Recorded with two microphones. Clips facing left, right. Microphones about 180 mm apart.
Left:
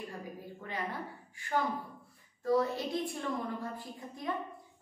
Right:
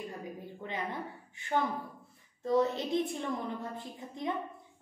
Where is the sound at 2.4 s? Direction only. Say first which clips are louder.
Right 1 dB; 20° right (ahead or behind).